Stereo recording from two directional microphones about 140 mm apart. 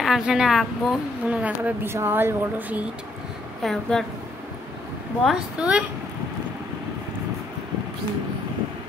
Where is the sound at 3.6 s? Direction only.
5° left (ahead or behind).